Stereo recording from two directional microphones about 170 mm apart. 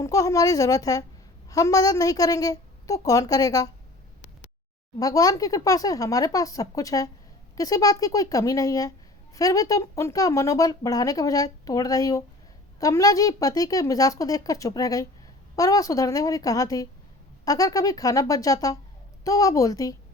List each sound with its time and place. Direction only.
0.0 s speech: 20° left (ahead or behind)
4.9 s speech: 20° left (ahead or behind)